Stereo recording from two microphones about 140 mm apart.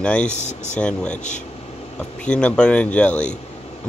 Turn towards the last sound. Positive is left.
turn(degrees=10)  # may be behind; listen again after turning